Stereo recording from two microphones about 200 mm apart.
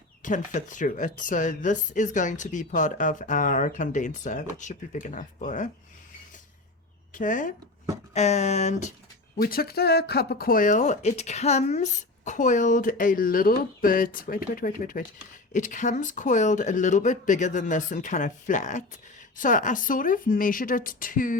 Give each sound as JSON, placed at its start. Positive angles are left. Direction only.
{"t": 0.2, "sound": "speech", "side_deg": 40}
{"t": 7.1, "sound": "speech", "side_deg": 40}
{"t": 9.4, "sound": "speech", "side_deg": 45}